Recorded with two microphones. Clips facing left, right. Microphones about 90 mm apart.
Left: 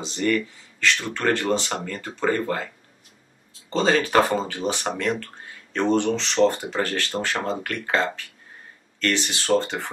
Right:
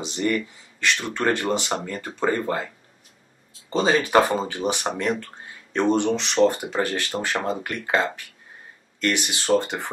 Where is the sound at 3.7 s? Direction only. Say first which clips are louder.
Right 1 dB; 15° right (ahead or behind).